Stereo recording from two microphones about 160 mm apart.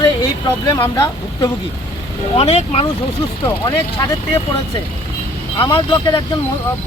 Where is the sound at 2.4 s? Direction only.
40° left (ahead or behind).